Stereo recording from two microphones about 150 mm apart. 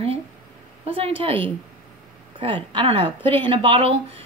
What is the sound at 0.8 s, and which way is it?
Speech, 40° right (ahead or behind).